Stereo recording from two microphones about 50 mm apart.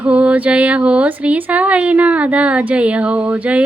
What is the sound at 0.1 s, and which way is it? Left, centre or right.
Speech, right.